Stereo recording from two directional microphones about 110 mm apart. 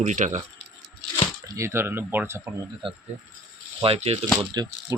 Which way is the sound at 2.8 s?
50° right (ahead or behind).